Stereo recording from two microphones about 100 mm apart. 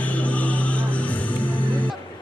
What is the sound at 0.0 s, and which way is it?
Music, 15° left (ahead or behind).